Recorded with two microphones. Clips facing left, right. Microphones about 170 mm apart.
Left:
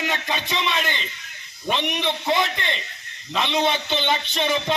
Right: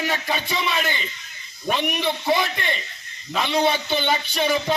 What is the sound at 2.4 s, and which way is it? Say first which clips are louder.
Speech: even; 20° left (ahead or behind).